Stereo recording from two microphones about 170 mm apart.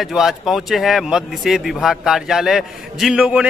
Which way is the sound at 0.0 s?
Centre (ahead or behind).